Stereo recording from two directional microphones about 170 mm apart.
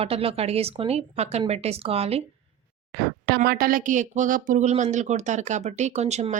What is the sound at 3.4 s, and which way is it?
Speech, 60° right (ahead or behind).